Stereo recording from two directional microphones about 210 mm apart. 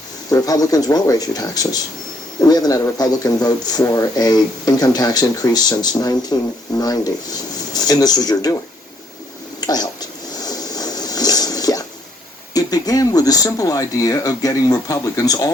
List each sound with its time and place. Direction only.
0.3 s speech: 15° left (ahead or behind)
9.6 s a sound: 20° left (ahead or behind)
12.5 s speech: 15° left (ahead or behind)